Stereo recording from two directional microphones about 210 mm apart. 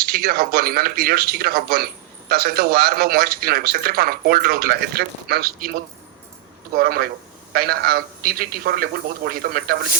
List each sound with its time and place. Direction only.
0.0 s speech: 45° right (ahead or behind)